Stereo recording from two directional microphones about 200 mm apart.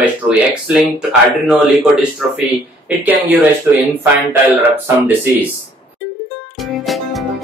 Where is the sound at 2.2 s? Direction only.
5° right (ahead or behind).